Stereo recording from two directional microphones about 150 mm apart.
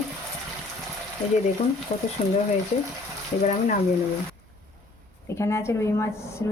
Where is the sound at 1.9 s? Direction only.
50° left (ahead or behind).